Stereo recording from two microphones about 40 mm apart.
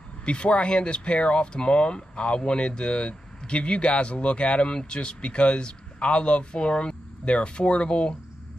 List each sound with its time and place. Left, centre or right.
0.2 s speech: left